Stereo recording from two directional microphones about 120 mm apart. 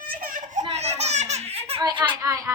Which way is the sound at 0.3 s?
80° right.